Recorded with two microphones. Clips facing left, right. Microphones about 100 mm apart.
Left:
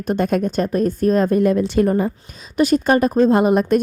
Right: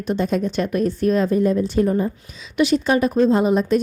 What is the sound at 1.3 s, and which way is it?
Speech, 75° left (ahead or behind).